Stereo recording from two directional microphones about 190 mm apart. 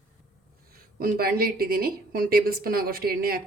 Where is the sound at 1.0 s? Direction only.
50° right (ahead or behind).